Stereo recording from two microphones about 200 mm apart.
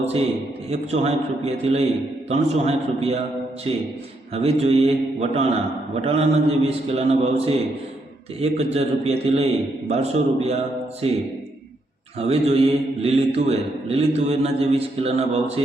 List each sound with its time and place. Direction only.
0.7 s speech: 30° right (ahead or behind)
4.4 s a man's voice: 30° right (ahead or behind)
12.2 s speech: 30° right (ahead or behind)